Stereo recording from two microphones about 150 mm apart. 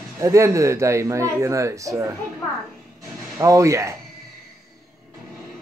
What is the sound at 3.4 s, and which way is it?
Speech, 20° right (ahead or behind).